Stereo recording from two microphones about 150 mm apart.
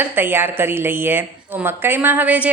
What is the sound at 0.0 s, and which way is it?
A woman's voice, 15° right (ahead or behind).